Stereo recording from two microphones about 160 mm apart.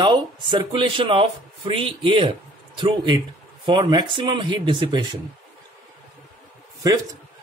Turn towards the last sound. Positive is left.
turn(degrees=-25)  # may be behind; listen again after turning